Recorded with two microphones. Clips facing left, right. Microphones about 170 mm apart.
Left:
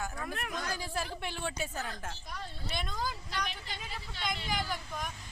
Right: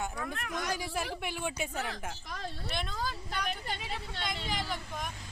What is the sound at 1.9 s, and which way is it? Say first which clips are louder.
Speech: right 2 dB; 80° right.